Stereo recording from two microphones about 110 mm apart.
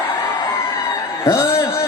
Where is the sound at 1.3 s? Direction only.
25° left (ahead or behind).